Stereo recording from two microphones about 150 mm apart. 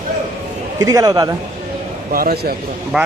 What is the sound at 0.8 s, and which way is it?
Speech, 25° right (ahead or behind).